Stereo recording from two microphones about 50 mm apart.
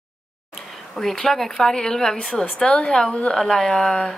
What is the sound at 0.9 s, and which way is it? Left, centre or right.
A woman's voice, centre.